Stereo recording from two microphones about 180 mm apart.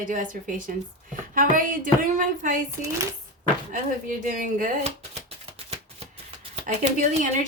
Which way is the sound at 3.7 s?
50° right (ahead or behind).